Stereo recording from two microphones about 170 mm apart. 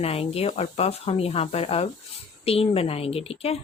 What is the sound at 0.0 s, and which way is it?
Speech, 35° left (ahead or behind).